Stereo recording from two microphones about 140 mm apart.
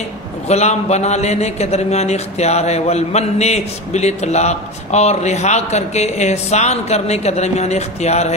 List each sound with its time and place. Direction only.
0.5 s a man's voice: 50° left (ahead or behind)